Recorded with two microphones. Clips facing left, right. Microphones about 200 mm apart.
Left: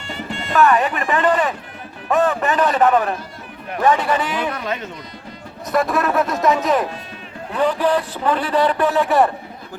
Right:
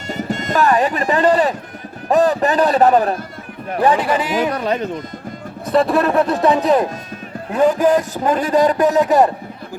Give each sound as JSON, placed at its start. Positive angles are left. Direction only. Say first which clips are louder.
{"t": 0.1, "sound": "a man's voice", "louder": "right 4 dB", "side_deg": -40}